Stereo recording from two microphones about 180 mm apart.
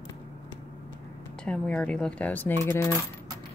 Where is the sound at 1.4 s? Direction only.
5° left (ahead or behind).